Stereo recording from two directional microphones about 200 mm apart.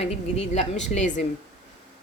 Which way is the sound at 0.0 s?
35° left (ahead or behind).